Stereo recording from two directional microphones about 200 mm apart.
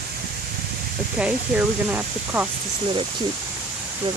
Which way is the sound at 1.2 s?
5° right (ahead or behind).